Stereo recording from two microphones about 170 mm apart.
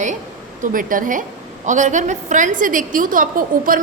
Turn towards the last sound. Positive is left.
turn(degrees=-55)  # may be behind; listen again after turning